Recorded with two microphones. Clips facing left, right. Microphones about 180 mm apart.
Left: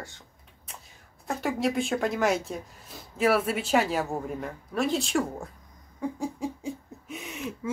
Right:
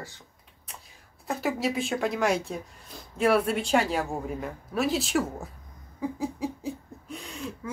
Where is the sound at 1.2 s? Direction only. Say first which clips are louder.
Even; centre (ahead or behind).